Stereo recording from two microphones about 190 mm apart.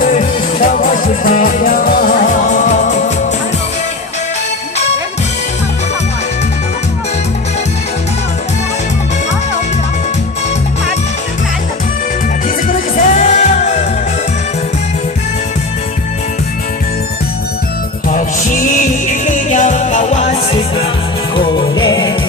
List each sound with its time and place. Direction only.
0.0 s music: 45° left (ahead or behind)
12.6 s music: 40° left (ahead or behind)
18.1 s music: 45° left (ahead or behind)
21.3 s music: 25° left (ahead or behind)